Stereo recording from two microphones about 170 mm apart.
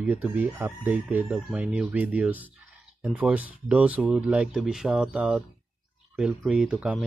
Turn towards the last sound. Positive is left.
turn(degrees=-5)  # may be behind; listen again after turning